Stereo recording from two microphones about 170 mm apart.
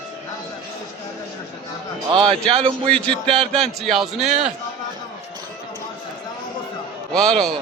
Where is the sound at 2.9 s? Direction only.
5° left (ahead or behind).